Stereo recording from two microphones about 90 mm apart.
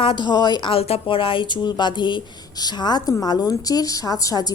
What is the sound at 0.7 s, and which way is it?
Speech, 80° left.